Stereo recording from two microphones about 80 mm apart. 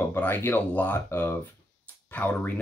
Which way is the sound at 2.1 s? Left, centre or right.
Left.